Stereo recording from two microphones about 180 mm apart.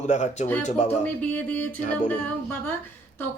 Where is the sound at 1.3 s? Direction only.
10° left (ahead or behind).